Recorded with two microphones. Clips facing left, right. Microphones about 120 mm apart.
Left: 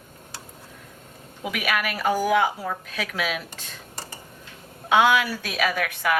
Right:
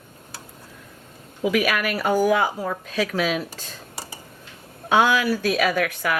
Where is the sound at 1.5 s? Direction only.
40° right (ahead or behind).